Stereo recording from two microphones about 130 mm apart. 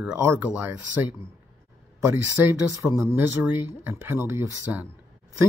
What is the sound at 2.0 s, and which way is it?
Speech, 15° right (ahead or behind).